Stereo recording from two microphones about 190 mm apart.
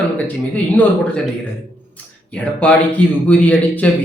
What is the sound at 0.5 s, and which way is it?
Speech, 5° left (ahead or behind).